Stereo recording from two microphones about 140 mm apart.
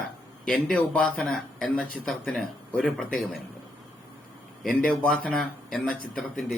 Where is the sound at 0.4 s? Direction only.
5° left (ahead or behind).